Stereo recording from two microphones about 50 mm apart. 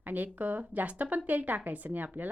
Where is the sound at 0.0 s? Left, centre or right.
Right.